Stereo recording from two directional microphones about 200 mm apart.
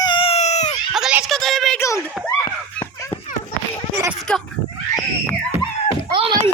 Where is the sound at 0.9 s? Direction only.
5° right (ahead or behind).